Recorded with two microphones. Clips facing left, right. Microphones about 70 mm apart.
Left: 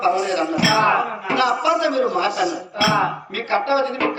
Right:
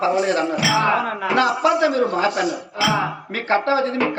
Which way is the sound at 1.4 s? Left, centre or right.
Right.